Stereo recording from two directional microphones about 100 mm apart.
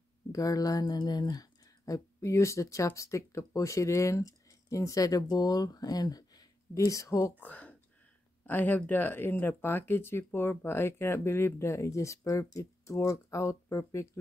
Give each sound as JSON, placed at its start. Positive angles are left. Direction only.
{"t": 0.3, "sound": "speech", "side_deg": 35}
{"t": 7.4, "sound": "speech", "side_deg": 15}